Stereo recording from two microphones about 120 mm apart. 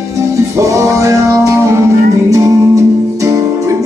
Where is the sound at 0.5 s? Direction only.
25° right (ahead or behind).